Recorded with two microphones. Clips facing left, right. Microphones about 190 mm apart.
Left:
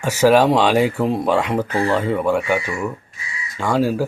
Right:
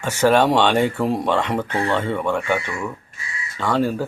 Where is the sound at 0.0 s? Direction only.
10° left (ahead or behind).